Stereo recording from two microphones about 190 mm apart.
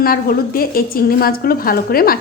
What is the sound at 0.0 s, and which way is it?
A woman's voice, 50° left (ahead or behind).